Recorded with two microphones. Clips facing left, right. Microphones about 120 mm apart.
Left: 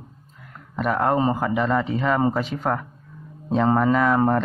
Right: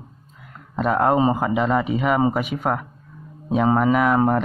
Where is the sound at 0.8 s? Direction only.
20° right (ahead or behind).